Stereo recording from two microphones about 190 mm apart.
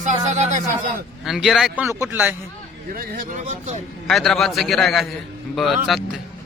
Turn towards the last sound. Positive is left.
turn(degrees=0)  # may be behind; listen again after turning